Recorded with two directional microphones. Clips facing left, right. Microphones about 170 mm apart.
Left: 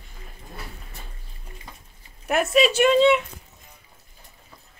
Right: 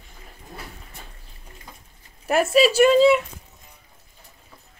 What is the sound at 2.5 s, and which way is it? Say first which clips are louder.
Speech: right 2 dB; centre (ahead or behind).